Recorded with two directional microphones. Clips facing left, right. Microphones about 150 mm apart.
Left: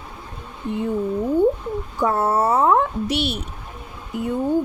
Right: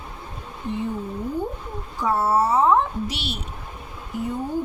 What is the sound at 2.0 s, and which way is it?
Speech, 55° left (ahead or behind).